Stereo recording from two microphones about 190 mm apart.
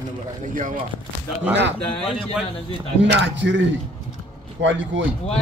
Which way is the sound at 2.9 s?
70° right (ahead or behind).